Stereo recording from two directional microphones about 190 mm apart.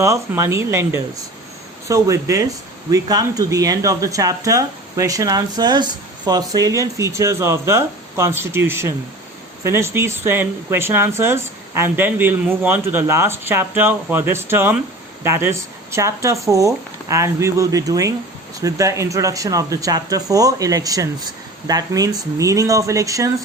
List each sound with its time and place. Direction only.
0.0 s speech: 15° right (ahead or behind)